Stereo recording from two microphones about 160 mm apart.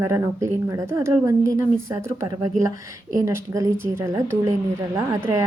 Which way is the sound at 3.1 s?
20° right (ahead or behind).